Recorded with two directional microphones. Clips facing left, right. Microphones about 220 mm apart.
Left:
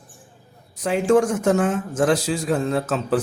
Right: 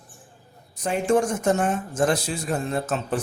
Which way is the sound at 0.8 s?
90° left.